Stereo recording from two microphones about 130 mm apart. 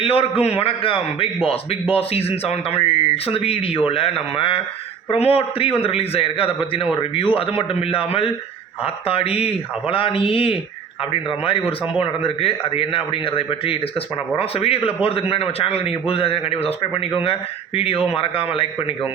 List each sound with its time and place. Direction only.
0.0 s a man's voice: 45° left (ahead or behind)